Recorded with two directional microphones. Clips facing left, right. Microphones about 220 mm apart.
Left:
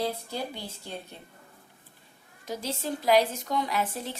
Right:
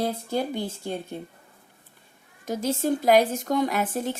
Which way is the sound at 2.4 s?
50° right (ahead or behind).